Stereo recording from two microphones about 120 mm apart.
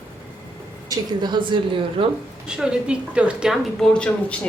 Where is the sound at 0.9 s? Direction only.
40° right (ahead or behind).